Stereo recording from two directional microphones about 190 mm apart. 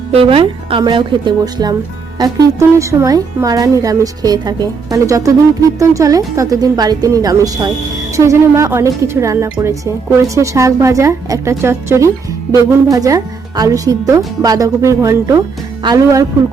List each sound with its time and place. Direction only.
0.1 s a woman's voice: 30° right (ahead or behind)